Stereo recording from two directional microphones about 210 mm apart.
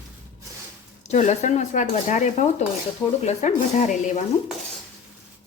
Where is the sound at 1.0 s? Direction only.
35° left (ahead or behind).